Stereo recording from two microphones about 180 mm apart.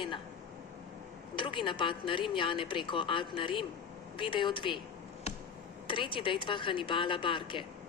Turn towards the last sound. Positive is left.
turn(degrees=30)  # may be behind; listen again after turning